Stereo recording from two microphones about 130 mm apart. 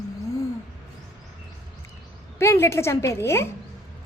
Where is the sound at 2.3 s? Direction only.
20° left (ahead or behind).